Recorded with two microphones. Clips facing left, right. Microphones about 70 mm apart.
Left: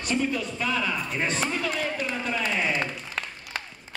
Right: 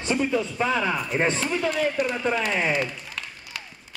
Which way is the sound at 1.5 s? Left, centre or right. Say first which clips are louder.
Right 4 dB; right.